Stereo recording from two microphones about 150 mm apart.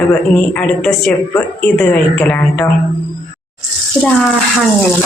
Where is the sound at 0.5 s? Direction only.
10° left (ahead or behind).